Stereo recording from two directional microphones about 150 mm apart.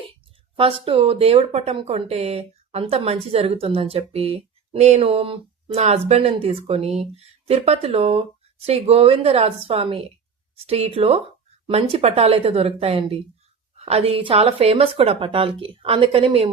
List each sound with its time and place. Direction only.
0.5 s speech: 35° right (ahead or behind)